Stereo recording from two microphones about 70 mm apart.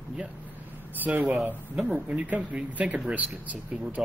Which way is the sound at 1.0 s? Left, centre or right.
Right.